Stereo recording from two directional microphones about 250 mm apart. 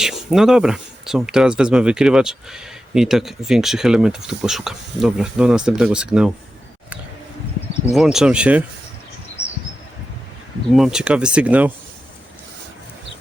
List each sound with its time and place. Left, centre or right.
0.0 s speech: centre
7.9 s speech: centre
9.4 s a sound: left
10.7 s speech: centre